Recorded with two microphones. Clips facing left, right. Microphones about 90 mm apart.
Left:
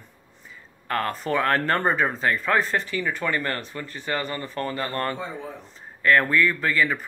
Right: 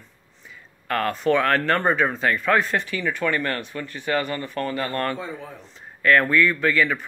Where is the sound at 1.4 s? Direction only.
25° left (ahead or behind).